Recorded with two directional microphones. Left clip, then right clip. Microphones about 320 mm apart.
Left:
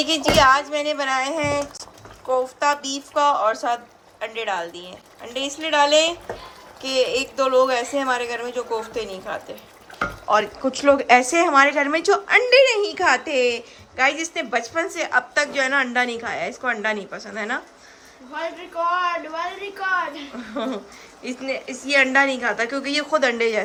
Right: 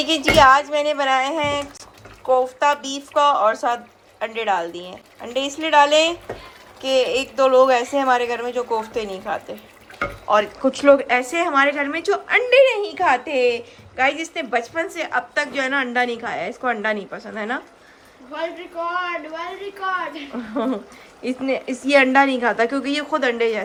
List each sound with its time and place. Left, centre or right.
0.0 s speech: centre
20.3 s speech: centre